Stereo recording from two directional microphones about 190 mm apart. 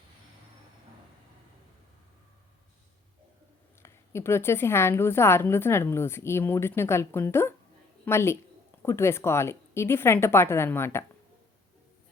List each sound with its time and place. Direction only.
3.8 s a woman's voice: 15° left (ahead or behind)